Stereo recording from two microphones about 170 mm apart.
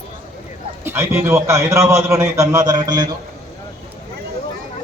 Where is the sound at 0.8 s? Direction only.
15° right (ahead or behind).